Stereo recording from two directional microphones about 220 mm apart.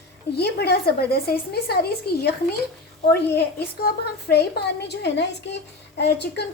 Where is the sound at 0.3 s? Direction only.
45° left (ahead or behind).